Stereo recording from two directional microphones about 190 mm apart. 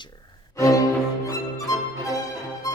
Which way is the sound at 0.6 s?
15° left (ahead or behind).